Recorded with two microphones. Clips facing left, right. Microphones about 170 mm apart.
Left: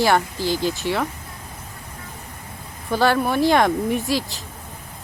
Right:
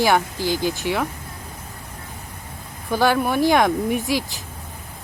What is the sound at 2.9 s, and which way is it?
Speech, 5° right (ahead or behind).